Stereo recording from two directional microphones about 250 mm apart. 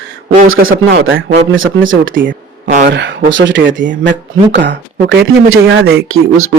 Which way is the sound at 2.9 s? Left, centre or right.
Right.